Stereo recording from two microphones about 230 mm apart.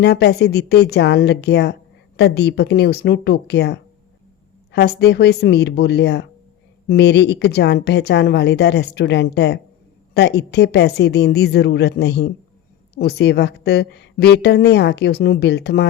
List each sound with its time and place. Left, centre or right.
0.0 s speech: left